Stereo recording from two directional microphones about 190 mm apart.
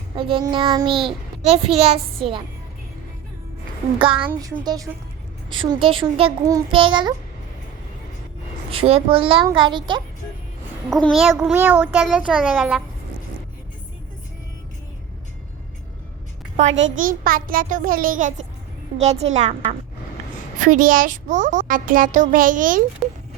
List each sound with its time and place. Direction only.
0.2 s a child's voice: 25° right (ahead or behind)
3.9 s a child's voice: 25° right (ahead or behind)
8.7 s a child's voice: 30° right (ahead or behind)
10.8 s a child's voice: centre (ahead or behind)
16.9 s a child's voice: 45° right (ahead or behind)
20.6 s a child's voice: 45° right (ahead or behind)